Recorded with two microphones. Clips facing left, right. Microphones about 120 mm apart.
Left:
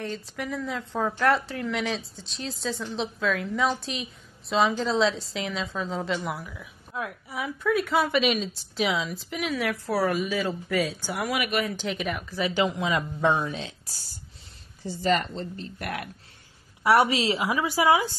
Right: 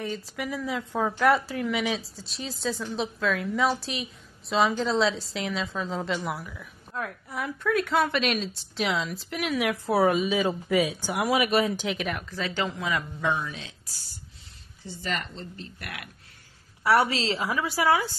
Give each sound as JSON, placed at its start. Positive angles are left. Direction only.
{"t": 0.0, "sound": "a woman's voice", "side_deg": -5}
{"t": 9.8, "sound": "speech", "side_deg": -20}
{"t": 11.2, "sound": "speech", "side_deg": -25}
{"t": 11.8, "sound": "a woman's voice", "side_deg": 0}
{"t": 13.2, "sound": "a woman's voice", "side_deg": 35}
{"t": 14.9, "sound": "a woman's voice", "side_deg": 40}
{"t": 16.8, "sound": "a woman's voice", "side_deg": 15}